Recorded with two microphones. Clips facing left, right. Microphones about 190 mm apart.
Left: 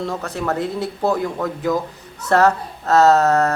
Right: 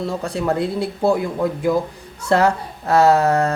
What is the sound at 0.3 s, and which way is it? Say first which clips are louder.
A man's voice: right 4 dB; 10° right (ahead or behind).